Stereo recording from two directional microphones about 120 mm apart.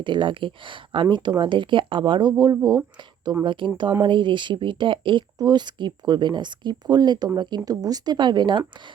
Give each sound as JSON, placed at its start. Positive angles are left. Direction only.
{"t": 0.0, "sound": "speech", "side_deg": -40}